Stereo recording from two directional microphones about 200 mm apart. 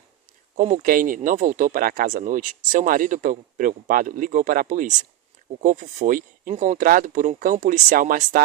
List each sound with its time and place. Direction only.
0.5 s speech: 40° right (ahead or behind)